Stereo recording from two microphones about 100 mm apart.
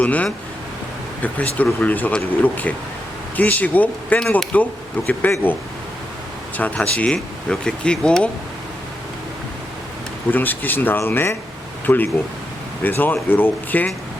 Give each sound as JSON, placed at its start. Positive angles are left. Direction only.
{"t": 0.0, "sound": "speech", "side_deg": 15}
{"t": 6.6, "sound": "speech", "side_deg": 15}
{"t": 10.3, "sound": "speech", "side_deg": 20}